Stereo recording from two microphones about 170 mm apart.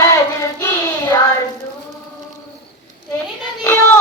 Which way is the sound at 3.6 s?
10° left (ahead or behind).